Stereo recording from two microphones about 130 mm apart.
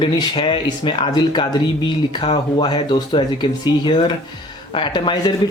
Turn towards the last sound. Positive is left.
turn(degrees=35)  # may be behind; listen again after turning